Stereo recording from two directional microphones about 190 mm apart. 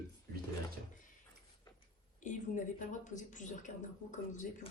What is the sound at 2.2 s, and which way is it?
Speech, 40° left (ahead or behind).